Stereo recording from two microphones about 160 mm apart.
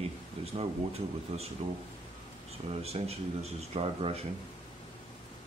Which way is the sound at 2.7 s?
40° right (ahead or behind).